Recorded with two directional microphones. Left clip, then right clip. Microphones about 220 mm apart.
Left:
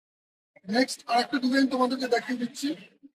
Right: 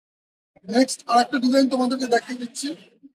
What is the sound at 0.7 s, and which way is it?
A man's voice, 40° right (ahead or behind).